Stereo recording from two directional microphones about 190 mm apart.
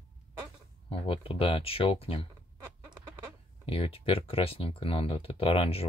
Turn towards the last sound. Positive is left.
turn(degrees=30)  # may be behind; listen again after turning